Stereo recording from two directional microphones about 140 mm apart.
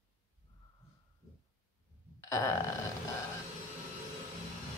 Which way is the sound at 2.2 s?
20° left (ahead or behind).